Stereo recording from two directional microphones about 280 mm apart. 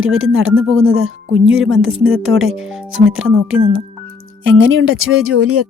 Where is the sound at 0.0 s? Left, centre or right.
Right.